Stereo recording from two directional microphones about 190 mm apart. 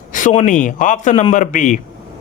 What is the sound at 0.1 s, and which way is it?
A man's voice, 40° left (ahead or behind).